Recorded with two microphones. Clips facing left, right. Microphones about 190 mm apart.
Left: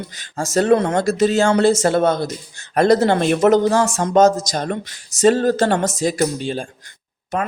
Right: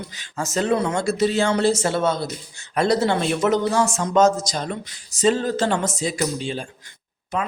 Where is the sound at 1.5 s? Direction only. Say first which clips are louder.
Left 5 dB; 60° left (ahead or behind).